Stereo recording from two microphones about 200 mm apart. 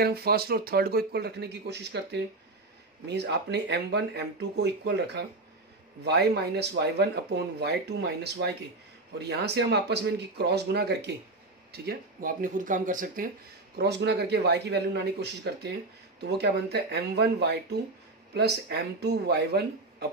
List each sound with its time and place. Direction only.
0.0 s speech: 50° right (ahead or behind)
13.7 s speech: 60° right (ahead or behind)